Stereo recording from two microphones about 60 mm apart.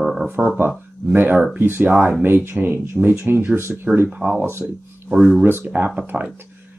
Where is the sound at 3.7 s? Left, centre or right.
Centre.